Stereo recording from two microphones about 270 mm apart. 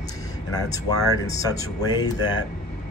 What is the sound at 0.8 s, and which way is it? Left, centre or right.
Speech, centre.